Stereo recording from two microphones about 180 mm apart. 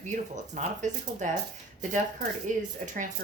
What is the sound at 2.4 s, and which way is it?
Speech, 45° right (ahead or behind).